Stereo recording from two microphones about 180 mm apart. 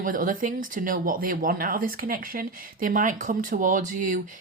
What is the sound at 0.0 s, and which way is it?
Speech, 50° right (ahead or behind).